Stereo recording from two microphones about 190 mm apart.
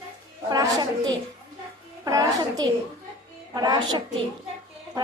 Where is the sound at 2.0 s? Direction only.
20° right (ahead or behind).